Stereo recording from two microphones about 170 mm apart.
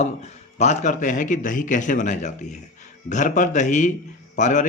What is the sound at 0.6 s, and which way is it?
Speech, 40° left (ahead or behind).